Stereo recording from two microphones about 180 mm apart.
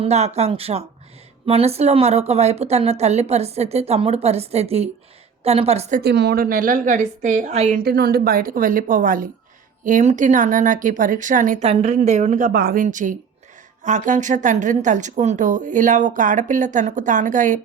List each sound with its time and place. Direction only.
0.0 s speech: 35° right (ahead or behind)
6.0 s speech: 65° right (ahead or behind); by 7.8 s 40° right (ahead or behind)
7.9 s speech: 60° right (ahead or behind); by 17.6 s 45° right (ahead or behind)